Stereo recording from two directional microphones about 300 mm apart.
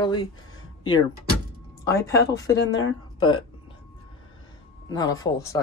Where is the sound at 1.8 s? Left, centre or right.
Centre.